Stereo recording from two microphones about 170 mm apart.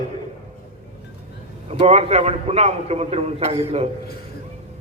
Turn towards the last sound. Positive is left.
turn(degrees=-40)  # may be behind; listen again after turning